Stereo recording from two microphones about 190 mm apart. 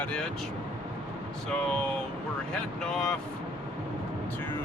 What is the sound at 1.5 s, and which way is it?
Speech, 5° left (ahead or behind).